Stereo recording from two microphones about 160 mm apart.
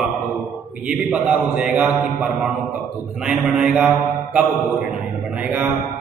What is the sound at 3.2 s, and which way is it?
Mantra, 5° right (ahead or behind).